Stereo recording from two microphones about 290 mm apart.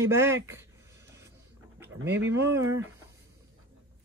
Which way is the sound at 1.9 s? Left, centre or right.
Right.